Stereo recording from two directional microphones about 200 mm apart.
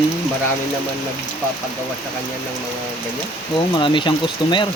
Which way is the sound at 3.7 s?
25° left (ahead or behind).